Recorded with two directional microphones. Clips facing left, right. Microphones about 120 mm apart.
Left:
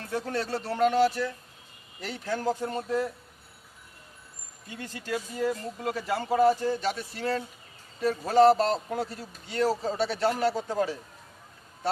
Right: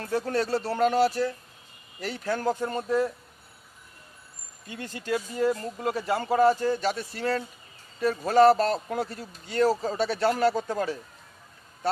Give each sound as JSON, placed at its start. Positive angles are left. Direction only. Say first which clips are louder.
{"t": 0.0, "sound": "speech", "louder": "right 4 dB", "side_deg": -45}
{"t": 2.3, "sound": "speech", "louder": "right 1 dB", "side_deg": -55}
{"t": 4.7, "sound": "speech", "louder": "right 3 dB", "side_deg": -60}
{"t": 9.5, "sound": "speech", "louder": "right 3 dB", "side_deg": -45}